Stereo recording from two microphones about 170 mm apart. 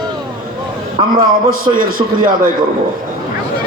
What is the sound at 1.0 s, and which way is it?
Speech, 30° right (ahead or behind).